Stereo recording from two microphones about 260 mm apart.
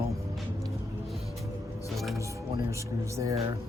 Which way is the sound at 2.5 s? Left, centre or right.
Centre.